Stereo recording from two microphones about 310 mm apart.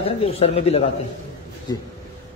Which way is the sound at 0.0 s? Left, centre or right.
Centre.